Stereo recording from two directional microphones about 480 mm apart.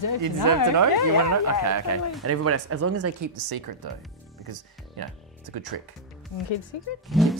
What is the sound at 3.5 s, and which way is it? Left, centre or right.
Speech, right.